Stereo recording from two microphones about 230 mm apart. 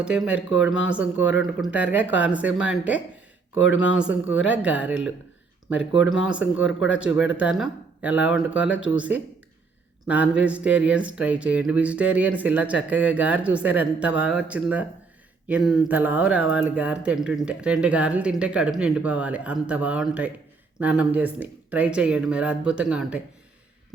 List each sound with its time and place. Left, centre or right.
0.0 s speech: centre
3.6 s speech: left
3.9 s speech: centre
6.2 s speech: centre
10.1 s speech: centre